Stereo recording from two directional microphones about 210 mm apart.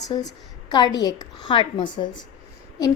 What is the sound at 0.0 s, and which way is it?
A woman's voice, 20° left (ahead or behind).